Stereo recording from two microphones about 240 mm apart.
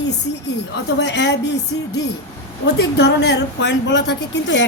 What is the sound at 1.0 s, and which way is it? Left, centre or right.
Speech, left.